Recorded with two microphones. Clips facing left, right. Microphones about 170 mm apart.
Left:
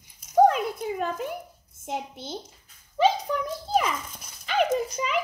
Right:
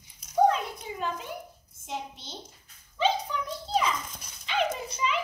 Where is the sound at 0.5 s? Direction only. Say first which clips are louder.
Left 5 dB; 55° left (ahead or behind).